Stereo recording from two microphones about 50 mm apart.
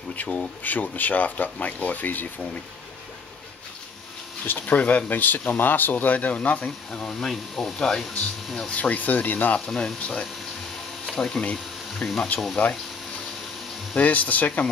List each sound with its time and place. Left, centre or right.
0.2 s speech: left
4.5 s speech: left
6.9 s speech: centre
8.0 s speech: centre
8.6 s speech: left
9.7 s speech: centre
9.9 s speech: centre
12.0 s speech: left
13.9 s speech: left